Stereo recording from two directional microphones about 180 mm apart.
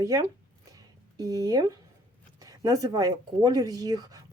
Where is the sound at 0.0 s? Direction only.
20° right (ahead or behind).